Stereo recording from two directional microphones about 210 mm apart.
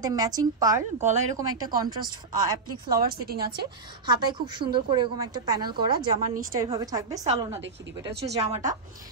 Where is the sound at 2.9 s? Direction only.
45° right (ahead or behind).